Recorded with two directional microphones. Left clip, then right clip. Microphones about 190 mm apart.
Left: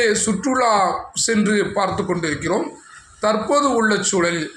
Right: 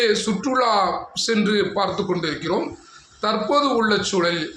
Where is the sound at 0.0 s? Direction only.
15° left (ahead or behind).